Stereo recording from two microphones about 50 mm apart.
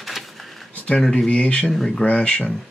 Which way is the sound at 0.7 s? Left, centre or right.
Left.